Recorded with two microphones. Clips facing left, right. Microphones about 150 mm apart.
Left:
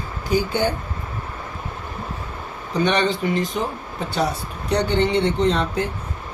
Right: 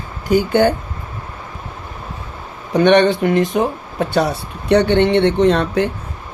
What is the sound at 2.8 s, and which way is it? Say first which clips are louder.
Speech: right 8 dB; 60° right (ahead or behind).